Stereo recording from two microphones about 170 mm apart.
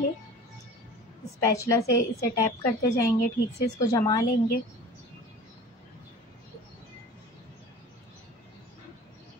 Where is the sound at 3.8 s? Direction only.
20° left (ahead or behind).